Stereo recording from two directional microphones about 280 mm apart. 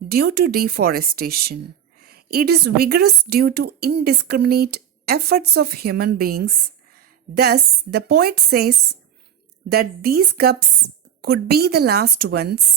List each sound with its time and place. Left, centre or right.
0.1 s a woman's voice: right